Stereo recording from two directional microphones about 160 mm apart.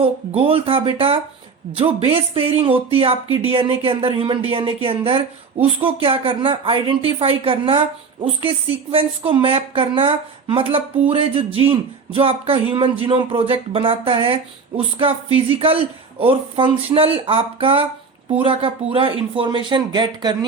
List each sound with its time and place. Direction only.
0.4 s speech: 35° right (ahead or behind)
8.9 s speech: 35° right (ahead or behind)